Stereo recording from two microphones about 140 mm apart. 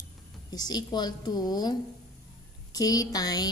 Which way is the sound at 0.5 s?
30° left (ahead or behind).